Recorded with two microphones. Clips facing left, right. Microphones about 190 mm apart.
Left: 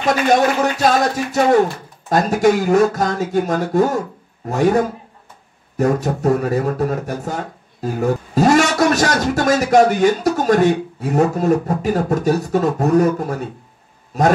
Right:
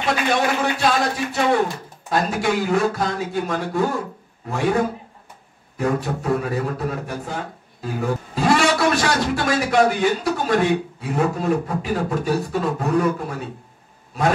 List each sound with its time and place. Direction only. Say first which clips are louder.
0.0 s speech: left 6 dB; 40° left (ahead or behind)